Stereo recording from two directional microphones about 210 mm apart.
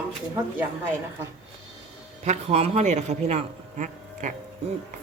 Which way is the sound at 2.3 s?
30° right (ahead or behind).